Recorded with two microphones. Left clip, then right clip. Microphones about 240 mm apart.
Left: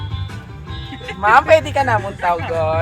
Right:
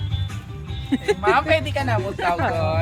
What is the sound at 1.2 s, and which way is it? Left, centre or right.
Speech, centre.